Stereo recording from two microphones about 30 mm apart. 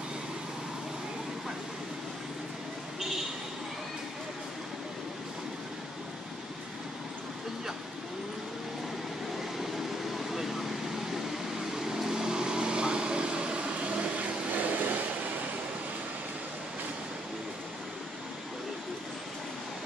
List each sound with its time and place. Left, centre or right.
10.1 s vehicle: centre; by 15.0 s right